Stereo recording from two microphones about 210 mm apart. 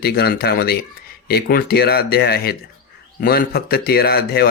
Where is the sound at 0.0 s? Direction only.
50° left (ahead or behind).